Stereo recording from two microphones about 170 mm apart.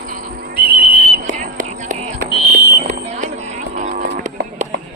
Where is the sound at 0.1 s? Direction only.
55° right (ahead or behind).